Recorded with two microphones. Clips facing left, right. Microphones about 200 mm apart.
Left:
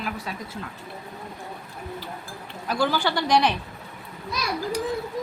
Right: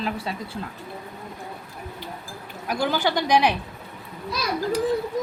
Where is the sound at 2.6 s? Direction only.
15° right (ahead or behind).